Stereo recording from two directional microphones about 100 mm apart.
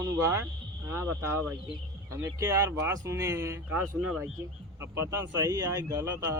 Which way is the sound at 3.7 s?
15° right (ahead or behind).